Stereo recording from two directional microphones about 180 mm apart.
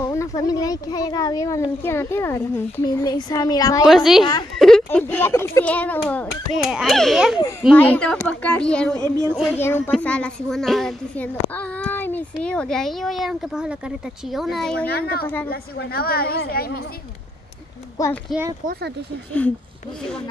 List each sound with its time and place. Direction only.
0.0 s speech: 15° left (ahead or behind)
3.8 s speech: centre (ahead or behind)
4.6 s a sound: centre (ahead or behind)
4.8 s speech: 10° left (ahead or behind)
6.5 s speech: centre (ahead or behind)
8.9 s speech: 20° right (ahead or behind)
9.6 s speech: 15° left (ahead or behind)
14.9 s a woman's voice: 60° left (ahead or behind)
15.2 s speech: 10° left (ahead or behind)
15.5 s a woman's voice: 60° left (ahead or behind)